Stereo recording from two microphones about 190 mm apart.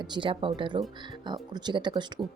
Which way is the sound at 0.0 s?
25° right (ahead or behind).